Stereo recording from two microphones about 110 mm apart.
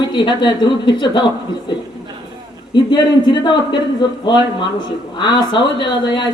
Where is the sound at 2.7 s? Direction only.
45° left (ahead or behind).